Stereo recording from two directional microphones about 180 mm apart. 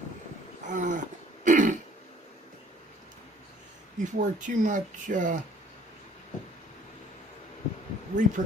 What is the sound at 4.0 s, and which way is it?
Speech, 45° right (ahead or behind).